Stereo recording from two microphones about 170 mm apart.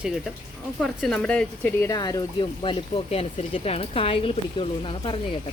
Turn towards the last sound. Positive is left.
turn(degrees=30)  # may be behind; listen again after turning